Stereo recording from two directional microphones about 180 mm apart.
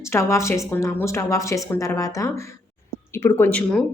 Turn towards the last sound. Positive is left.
turn(degrees=5)  # may be behind; listen again after turning